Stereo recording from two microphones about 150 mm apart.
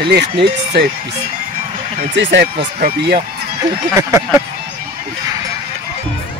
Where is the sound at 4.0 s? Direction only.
20° right (ahead or behind).